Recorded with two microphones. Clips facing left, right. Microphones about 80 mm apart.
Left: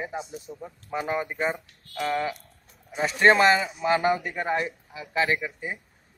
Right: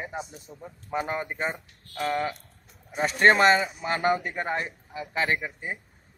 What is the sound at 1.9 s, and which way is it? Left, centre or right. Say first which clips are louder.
A man's voice: left 1 dB; centre.